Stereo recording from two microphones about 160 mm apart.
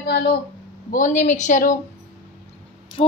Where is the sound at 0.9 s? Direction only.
50° left (ahead or behind).